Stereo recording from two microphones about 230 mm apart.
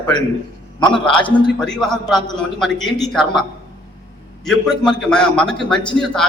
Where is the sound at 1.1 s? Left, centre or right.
Centre.